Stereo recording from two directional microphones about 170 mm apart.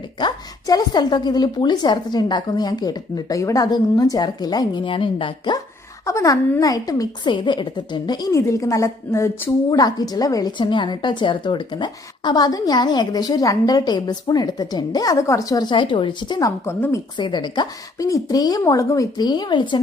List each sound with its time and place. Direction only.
0.2 s a woman's voice: 25° left (ahead or behind)
6.1 s a woman's voice: 20° left (ahead or behind)
16.6 s a woman's voice: 15° left (ahead or behind)
17.2 s a woman's voice: 25° left (ahead or behind)